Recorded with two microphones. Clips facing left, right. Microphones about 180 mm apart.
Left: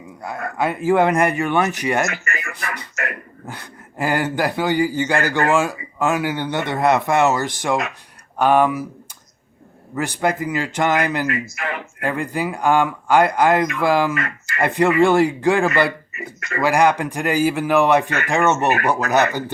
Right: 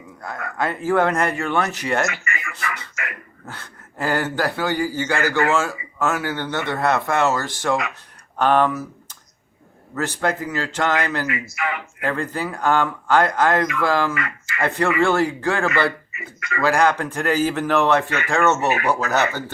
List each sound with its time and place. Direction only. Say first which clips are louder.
0.2 s speech: left 3 dB; 10° left (ahead or behind)
2.0 s speech: left 1 dB; 45° left (ahead or behind)
3.4 s speech: left 1 dB; 15° left (ahead or behind)
9.9 s speech: left 2 dB; 15° left (ahead or behind)
11.3 s a sound: left 1 dB; 45° left (ahead or behind)
12.0 s speech: left 2 dB; 15° left (ahead or behind)